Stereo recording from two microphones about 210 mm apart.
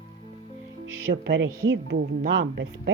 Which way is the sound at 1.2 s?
60° right (ahead or behind).